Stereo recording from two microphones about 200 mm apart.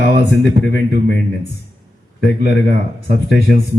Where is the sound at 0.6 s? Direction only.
60° left (ahead or behind).